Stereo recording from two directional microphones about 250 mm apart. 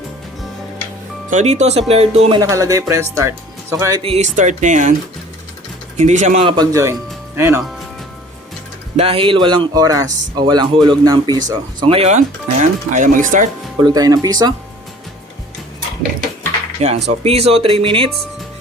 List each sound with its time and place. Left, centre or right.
1.3 s speech: right
6.0 s speech: right; by 7.6 s centre
9.0 s speech: right
13.7 s speech: centre
16.8 s speech: right